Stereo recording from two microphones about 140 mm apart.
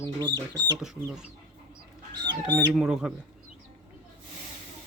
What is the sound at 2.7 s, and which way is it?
Speech, 5° right (ahead or behind).